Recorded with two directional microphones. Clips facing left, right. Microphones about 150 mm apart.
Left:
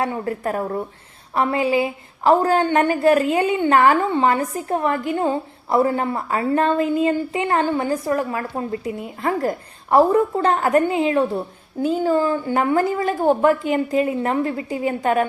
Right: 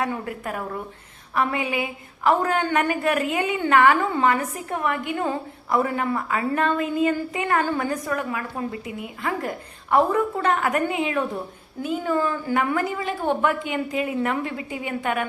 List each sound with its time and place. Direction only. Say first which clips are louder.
0.0 s a woman's voice: left 4 dB; 35° left (ahead or behind)